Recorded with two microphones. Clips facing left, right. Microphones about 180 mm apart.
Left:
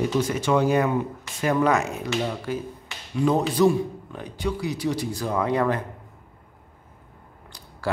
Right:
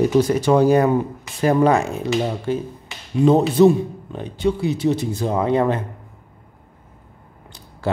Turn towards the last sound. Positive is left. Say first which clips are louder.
# right 4 dB
turn(degrees=-25)  # may be behind; listen again after turning